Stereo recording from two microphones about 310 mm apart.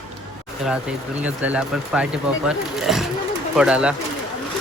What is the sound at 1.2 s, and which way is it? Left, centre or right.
Speech, centre.